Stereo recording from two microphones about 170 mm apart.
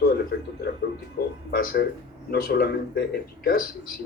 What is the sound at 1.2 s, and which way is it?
Speech, 60° left (ahead or behind).